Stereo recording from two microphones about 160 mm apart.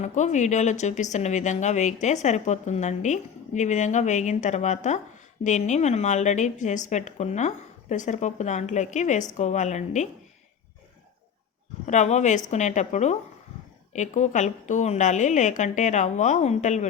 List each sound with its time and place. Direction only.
0.0 s a woman's voice: 45° left (ahead or behind)
11.9 s a woman's voice: 45° left (ahead or behind)